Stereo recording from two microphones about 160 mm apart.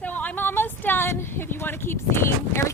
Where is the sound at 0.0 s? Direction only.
10° left (ahead or behind).